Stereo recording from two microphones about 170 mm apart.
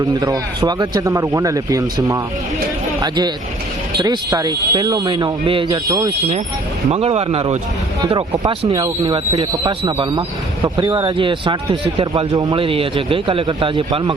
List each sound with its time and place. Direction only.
0.0 s speech: 20° right (ahead or behind)
6.9 s speech: 35° right (ahead or behind)